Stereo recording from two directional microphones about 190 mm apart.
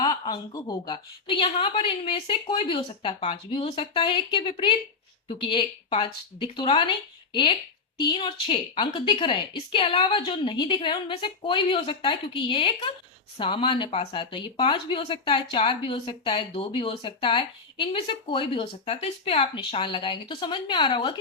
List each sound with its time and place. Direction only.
0.0 s speech: 20° left (ahead or behind)
7.9 s speech: 25° left (ahead or behind)